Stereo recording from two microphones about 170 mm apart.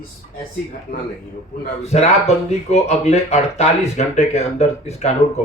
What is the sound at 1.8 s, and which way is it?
Speech, 40° left (ahead or behind).